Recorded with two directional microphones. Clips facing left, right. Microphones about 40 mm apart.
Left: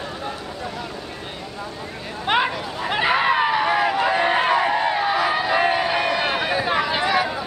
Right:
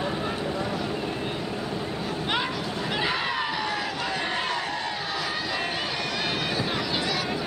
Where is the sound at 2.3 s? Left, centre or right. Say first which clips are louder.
Left 10 dB; left.